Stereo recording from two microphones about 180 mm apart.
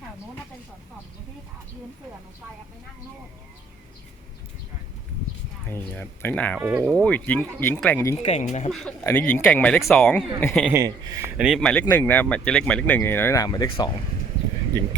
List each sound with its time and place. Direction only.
5.6 s speech: 10° left (ahead or behind)
6.6 s speech: 10° right (ahead or behind)
6.9 s speech: 5° left (ahead or behind)
8.2 s speech: 40° left (ahead or behind)
9.0 s a man's voice: 10° left (ahead or behind)
10.7 s a man's voice: 20° right (ahead or behind)
11.3 s a man's voice: 5° right (ahead or behind)
11.6 s speech: 10° left (ahead or behind)